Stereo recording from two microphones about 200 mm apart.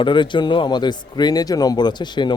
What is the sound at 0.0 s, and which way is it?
Speech, 25° left (ahead or behind).